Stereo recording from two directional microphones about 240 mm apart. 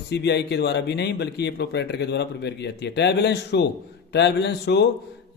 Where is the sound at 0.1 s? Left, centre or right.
Left.